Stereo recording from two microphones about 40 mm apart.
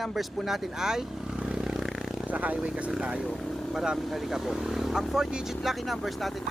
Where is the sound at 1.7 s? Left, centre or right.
Centre.